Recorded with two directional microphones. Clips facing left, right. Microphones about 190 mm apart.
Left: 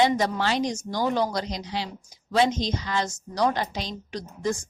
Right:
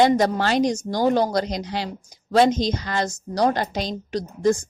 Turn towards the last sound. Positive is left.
turn(degrees=-35)  # may be behind; listen again after turning